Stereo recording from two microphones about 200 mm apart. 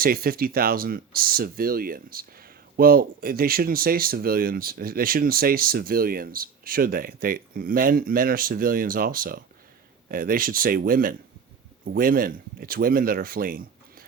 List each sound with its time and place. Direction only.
0.0 s speech: 45° right (ahead or behind)